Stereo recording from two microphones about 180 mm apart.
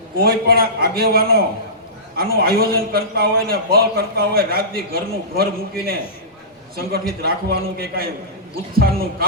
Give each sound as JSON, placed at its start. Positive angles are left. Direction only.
{"t": 0.2, "sound": "a man's voice", "side_deg": -60}